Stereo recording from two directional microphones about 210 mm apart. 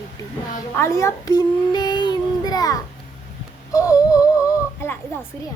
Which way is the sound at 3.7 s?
15° left (ahead or behind).